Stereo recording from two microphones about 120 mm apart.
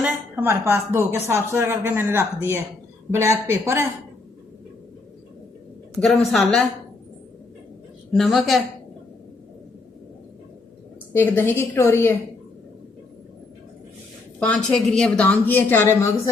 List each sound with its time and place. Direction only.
0.0 s a woman's voice: 20° right (ahead or behind)
6.1 s a woman's voice: centre (ahead or behind)
8.1 s a woman's voice: centre (ahead or behind)
11.1 s a woman's voice: 15° left (ahead or behind)
14.3 s a woman's voice: 10° left (ahead or behind)